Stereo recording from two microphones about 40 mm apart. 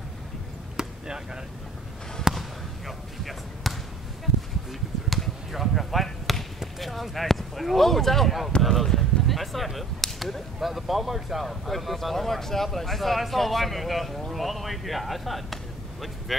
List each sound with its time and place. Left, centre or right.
0.7 s chop: centre
2.3 s basketball bounce: centre
5.1 s basketball bounce: centre
6.6 s speech: centre